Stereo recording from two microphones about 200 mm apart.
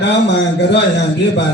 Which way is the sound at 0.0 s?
60° left (ahead or behind).